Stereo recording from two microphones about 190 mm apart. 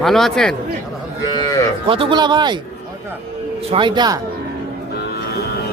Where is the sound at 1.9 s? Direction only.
25° right (ahead or behind).